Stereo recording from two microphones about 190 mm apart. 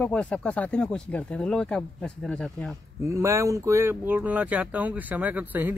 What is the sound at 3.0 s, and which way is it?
Speech, 15° right (ahead or behind).